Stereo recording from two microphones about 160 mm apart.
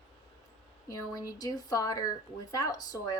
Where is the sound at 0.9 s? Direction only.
20° left (ahead or behind).